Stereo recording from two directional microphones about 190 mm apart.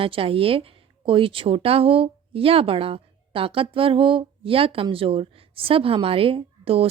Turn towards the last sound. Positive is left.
turn(degrees=-30)  # may be behind; listen again after turning